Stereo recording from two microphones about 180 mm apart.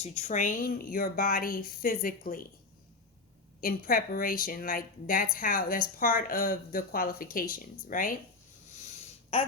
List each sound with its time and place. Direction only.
0.0 s a woman's voice: 35° left (ahead or behind)
3.6 s a woman's voice: 50° left (ahead or behind)